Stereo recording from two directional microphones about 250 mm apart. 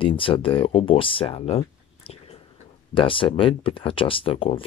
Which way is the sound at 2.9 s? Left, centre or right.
Left.